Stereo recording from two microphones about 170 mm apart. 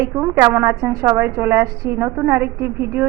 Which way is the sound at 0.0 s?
20° right (ahead or behind).